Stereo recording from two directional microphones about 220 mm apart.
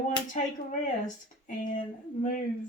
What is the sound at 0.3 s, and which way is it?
Speech, 35° left (ahead or behind).